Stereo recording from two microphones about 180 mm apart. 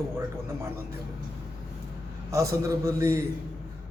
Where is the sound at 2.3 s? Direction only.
15° right (ahead or behind).